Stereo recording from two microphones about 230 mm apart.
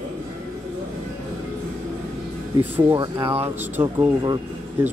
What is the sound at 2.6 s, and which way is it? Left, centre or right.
Speech, centre.